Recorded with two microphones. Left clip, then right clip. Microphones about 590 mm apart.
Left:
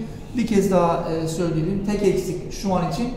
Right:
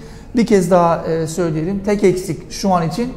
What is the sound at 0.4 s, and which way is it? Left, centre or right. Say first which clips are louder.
A woman's voice: right 7 dB; right.